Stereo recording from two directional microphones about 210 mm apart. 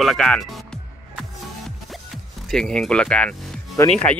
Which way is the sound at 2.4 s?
Centre (ahead or behind).